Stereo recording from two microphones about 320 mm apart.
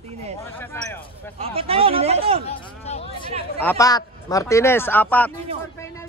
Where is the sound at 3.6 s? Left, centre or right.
Centre.